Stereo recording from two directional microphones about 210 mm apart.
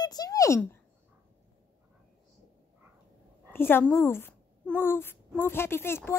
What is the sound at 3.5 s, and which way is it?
Speech, 10° left (ahead or behind).